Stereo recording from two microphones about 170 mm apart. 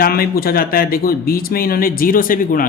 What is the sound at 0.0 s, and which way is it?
Speech, 60° left (ahead or behind).